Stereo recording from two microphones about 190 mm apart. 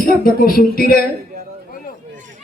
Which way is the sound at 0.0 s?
50° left (ahead or behind).